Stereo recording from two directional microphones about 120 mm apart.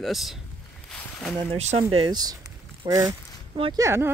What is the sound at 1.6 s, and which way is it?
Speech, 70° right (ahead or behind).